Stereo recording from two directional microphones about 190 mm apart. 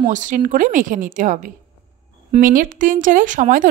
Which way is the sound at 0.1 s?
40° right (ahead or behind).